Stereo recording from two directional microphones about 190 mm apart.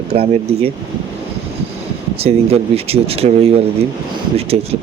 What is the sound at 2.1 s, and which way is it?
Speech, 30° right (ahead or behind).